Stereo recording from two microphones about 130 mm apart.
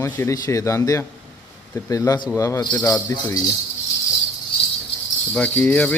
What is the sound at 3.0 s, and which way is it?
Speech, 25° left (ahead or behind).